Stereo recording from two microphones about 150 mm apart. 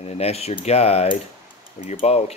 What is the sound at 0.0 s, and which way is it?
Speech, 45° left (ahead or behind).